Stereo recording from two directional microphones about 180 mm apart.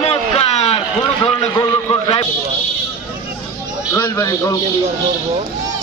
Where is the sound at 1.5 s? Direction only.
25° left (ahead or behind).